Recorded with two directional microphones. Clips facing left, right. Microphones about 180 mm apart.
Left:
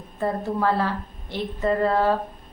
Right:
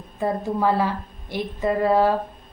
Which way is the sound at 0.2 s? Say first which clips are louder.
Right 1 dB; 15° right (ahead or behind).